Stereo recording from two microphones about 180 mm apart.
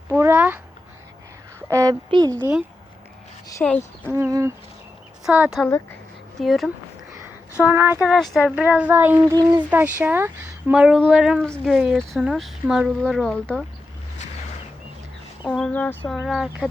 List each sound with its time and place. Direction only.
0.1 s a woman's voice: 10° right (ahead or behind)
1.7 s speech: 20° right (ahead or behind)
2.4 s speech: 5° right (ahead or behind)
3.6 s speech: 10° left (ahead or behind)
4.0 s a woman's voice: 15° right (ahead or behind)
5.2 s speech: 5° right (ahead or behind)
5.6 s speech: 10° left (ahead or behind)
6.4 s speech: centre (ahead or behind)
7.5 s a woman's voice: 10° right (ahead or behind)
9.6 s a woman's voice: 10° right (ahead or behind); by 13.7 s 5° left (ahead or behind)
15.4 s speech: 5° left (ahead or behind)
16.1 s speech: centre (ahead or behind)